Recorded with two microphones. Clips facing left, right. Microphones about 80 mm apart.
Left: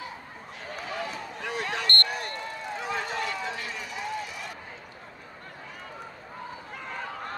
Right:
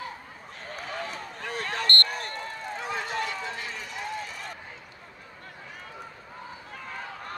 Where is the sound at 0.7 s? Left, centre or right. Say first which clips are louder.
Left 1 dB; right.